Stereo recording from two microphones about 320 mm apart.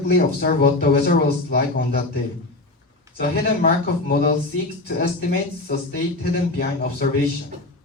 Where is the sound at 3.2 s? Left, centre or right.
Left.